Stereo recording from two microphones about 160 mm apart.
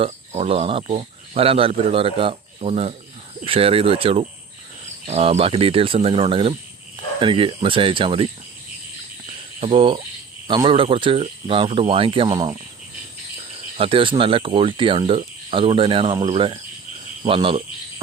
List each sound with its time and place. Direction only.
0.0 s speech: 35° right (ahead or behind)
9.6 s speech: 35° right (ahead or behind)
13.7 s speech: 35° right (ahead or behind)